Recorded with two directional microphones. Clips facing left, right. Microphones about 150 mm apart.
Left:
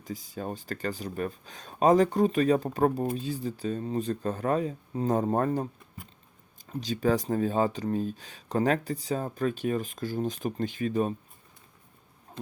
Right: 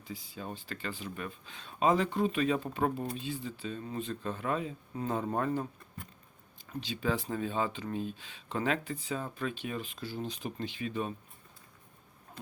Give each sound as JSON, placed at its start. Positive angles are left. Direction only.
{"t": 0.0, "sound": "speech", "side_deg": 45}
{"t": 6.7, "sound": "speech", "side_deg": 40}